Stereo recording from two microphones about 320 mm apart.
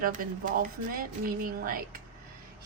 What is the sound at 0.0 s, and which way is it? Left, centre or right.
Speech, right.